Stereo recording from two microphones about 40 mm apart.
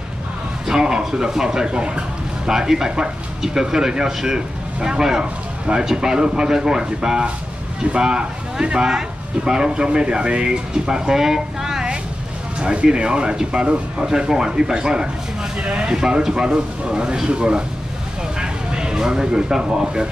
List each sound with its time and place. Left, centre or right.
0.7 s speech: centre
12.5 s speech: right